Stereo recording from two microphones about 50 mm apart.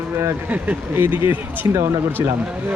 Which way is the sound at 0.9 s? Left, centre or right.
Right.